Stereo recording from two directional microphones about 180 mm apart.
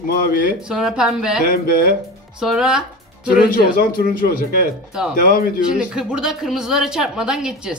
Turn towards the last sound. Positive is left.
turn(degrees=-5)  # may be behind; listen again after turning